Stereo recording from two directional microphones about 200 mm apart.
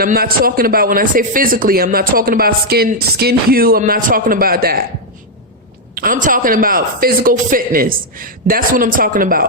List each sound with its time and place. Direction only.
0.0 s a man's voice: 50° right (ahead or behind)
5.9 s a man's voice: 45° right (ahead or behind)